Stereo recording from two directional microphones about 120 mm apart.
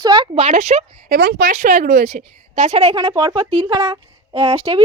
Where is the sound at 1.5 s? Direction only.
90° right; by 3.1 s 45° right (ahead or behind).